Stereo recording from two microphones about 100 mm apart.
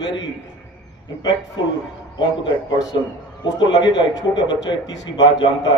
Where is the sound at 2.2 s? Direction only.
50° left (ahead or behind).